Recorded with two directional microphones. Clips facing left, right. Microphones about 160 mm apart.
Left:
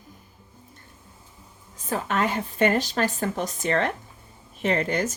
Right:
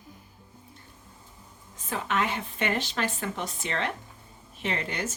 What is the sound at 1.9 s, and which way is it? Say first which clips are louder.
A woman's voice: left 4 dB; 40° left (ahead or behind).